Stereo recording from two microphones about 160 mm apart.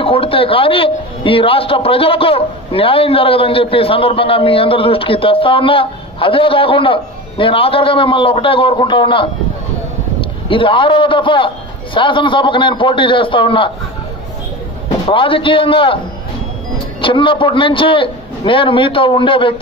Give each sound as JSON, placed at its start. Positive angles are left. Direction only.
{"t": 0.0, "sound": "a man's voice", "side_deg": 35}
{"t": 10.5, "sound": "a man's voice", "side_deg": 30}
{"t": 15.0, "sound": "a man's voice", "side_deg": 35}
{"t": 17.0, "sound": "a man's voice", "side_deg": 30}